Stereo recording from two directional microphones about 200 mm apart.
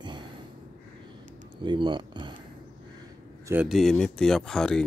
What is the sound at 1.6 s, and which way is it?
Speech, 25° right (ahead or behind).